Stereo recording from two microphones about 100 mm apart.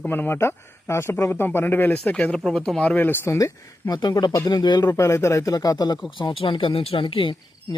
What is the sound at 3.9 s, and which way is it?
Speech, 45° left (ahead or behind).